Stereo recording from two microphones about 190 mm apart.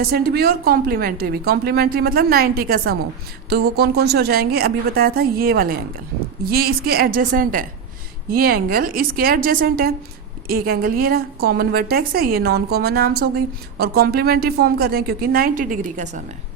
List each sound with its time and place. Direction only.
0.0 s a woman's voice: 55° right (ahead or behind)